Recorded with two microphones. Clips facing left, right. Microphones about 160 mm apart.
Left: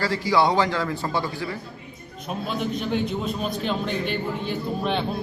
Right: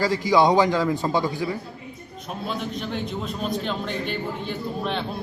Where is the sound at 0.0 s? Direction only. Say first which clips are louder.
Right 2 dB; 15° right (ahead or behind).